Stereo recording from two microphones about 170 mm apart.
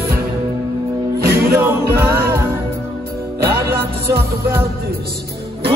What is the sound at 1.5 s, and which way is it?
Music, 15° right (ahead or behind).